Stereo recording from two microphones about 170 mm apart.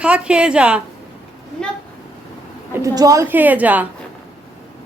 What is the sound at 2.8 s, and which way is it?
A man's voice, 20° right (ahead or behind).